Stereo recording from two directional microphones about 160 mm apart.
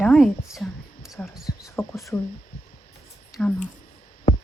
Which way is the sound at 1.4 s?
20° left (ahead or behind).